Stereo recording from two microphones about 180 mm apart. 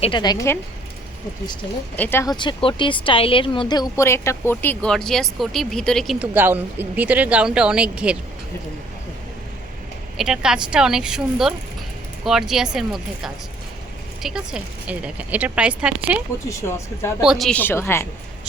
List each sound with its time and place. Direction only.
0.0 s speech: 25° left (ahead or behind)
2.0 s speech: 15° left (ahead or behind)
6.3 s speech: 10° right (ahead or behind)
10.2 s speech: 5° right (ahead or behind)
16.5 s speech: 15° left (ahead or behind)
17.2 s speech: centre (ahead or behind)